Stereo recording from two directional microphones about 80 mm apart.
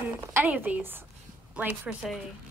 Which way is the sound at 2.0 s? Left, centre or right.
Centre.